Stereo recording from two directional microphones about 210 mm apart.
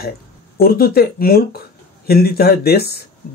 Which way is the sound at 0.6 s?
45° left (ahead or behind).